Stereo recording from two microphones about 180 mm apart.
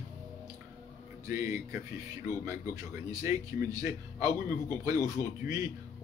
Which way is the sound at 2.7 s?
20° right (ahead or behind).